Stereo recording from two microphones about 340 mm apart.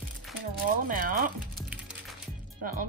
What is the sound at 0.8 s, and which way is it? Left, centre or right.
Speech, right.